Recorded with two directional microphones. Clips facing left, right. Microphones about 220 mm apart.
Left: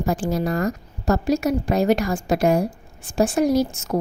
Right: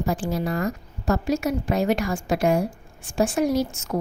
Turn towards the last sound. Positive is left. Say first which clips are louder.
# left 4 dB
turn(degrees=35)  # may be behind; listen again after turning